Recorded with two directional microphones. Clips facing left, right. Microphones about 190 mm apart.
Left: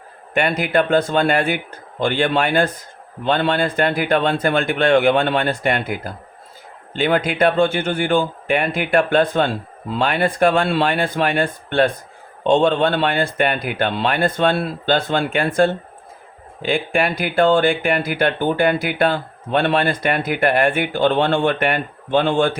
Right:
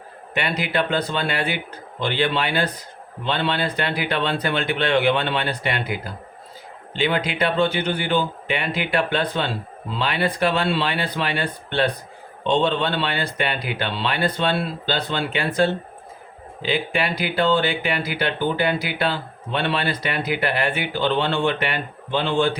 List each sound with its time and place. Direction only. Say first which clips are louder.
0.3 s speech: left 6 dB; 50° left (ahead or behind)